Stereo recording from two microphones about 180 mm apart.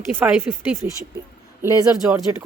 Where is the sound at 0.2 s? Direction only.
10° right (ahead or behind).